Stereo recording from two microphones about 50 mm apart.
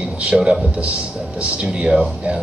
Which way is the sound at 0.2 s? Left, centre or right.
Right.